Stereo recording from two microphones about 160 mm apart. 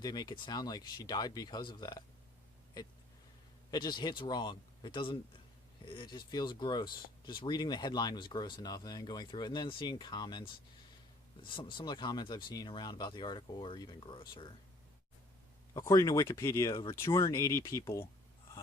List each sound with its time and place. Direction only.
0.0 s speech: 25° left (ahead or behind)
3.7 s speech: 25° left (ahead or behind)
15.7 s speech: 20° left (ahead or behind)